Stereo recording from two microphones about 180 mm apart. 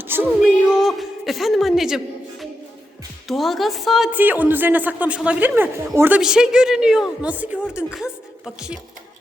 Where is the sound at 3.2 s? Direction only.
Centre (ahead or behind).